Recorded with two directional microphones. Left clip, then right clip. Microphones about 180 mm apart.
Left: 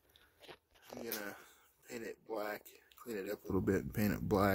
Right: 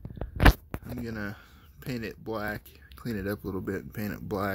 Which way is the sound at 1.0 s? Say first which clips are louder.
Right 4 dB; centre (ahead or behind).